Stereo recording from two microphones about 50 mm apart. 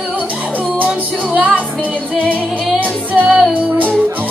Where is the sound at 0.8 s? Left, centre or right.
Right.